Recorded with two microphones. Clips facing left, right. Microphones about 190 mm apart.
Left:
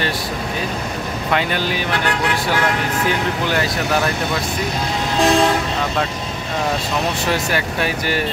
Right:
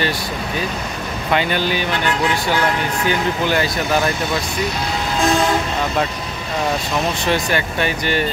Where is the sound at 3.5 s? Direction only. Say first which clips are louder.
Right 1 dB; centre (ahead or behind).